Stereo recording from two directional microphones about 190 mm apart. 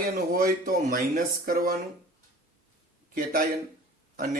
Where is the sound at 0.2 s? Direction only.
50° right (ahead or behind).